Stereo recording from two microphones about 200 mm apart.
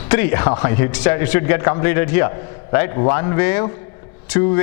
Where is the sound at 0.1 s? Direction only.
10° left (ahead or behind).